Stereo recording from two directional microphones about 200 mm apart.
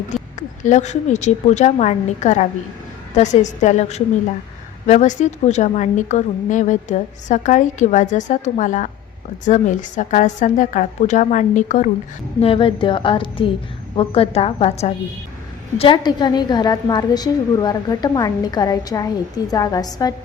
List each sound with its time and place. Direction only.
0.3 s a woman's voice: 35° left (ahead or behind); by 20.1 s 20° left (ahead or behind)